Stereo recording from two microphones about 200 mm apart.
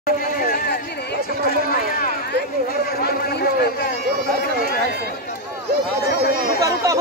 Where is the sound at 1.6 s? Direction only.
45° left (ahead or behind).